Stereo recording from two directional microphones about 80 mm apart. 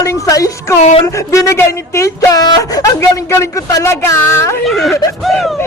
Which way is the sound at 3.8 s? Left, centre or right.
Left.